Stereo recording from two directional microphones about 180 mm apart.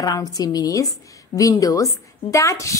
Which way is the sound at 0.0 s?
20° left (ahead or behind).